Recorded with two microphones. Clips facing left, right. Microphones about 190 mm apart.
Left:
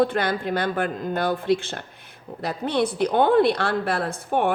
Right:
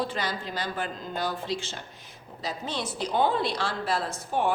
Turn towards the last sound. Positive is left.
turn(degrees=60)  # may be behind; listen again after turning